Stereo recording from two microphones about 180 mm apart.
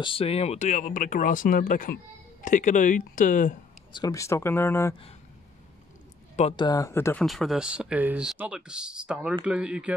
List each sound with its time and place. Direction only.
0.0 s speech: 30° left (ahead or behind); by 3.5 s 45° left (ahead or behind)
3.9 s speech: 20° left (ahead or behind)
6.5 s speech: 20° left (ahead or behind)
7.2 s speech: centre (ahead or behind)